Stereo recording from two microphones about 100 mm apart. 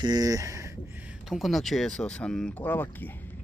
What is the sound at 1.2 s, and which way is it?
Speech, centre (ahead or behind).